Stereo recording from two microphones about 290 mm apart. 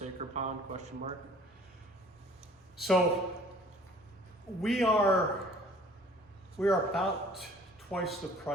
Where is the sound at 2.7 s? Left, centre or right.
Centre.